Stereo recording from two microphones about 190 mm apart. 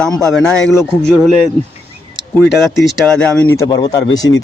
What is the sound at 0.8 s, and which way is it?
Speech, 10° right (ahead or behind).